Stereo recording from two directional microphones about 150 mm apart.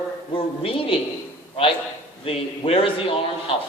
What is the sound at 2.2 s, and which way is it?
Speech, 40° left (ahead or behind).